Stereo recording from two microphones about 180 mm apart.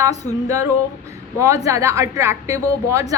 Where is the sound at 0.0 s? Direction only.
20° right (ahead or behind).